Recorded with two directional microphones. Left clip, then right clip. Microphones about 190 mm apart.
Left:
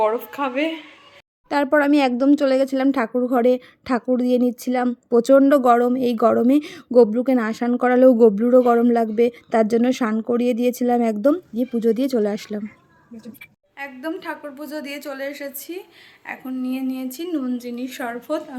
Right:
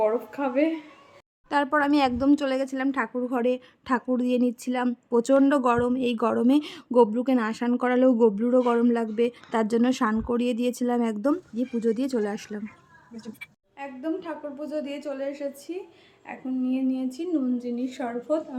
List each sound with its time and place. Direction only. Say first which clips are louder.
0.0 s a woman's voice: left 4 dB; 5° right (ahead or behind)
1.5 s a woman's voice: left 5 dB; 20° left (ahead or behind)
13.7 s a woman's voice: left 2 dB; centre (ahead or behind)